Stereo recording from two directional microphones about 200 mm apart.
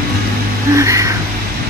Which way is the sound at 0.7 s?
15° right (ahead or behind).